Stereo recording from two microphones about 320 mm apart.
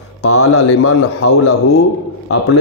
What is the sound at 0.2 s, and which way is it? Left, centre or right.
A man's voice, left.